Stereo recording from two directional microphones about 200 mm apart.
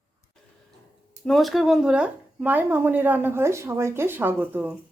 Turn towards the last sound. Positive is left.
turn(degrees=-10)  # may be behind; listen again after turning